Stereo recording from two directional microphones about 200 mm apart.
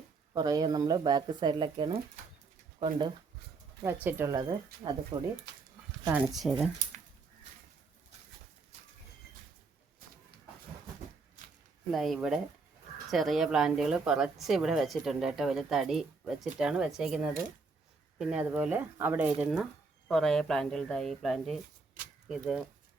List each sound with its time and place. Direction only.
0.3 s speech: 20° right (ahead or behind)
6.1 s a woman's voice: 5° right (ahead or behind)
11.9 s a woman's voice: centre (ahead or behind)